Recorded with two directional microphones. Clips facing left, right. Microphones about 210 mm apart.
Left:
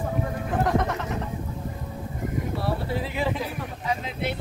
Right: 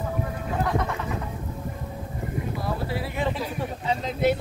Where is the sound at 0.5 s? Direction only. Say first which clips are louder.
Left 2 dB; 45° left (ahead or behind).